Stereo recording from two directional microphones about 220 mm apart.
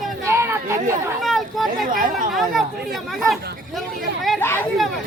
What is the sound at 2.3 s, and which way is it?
Chatter, centre (ahead or behind).